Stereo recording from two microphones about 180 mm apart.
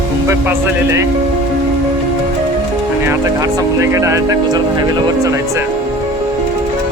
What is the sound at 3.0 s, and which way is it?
Speech, 15° right (ahead or behind).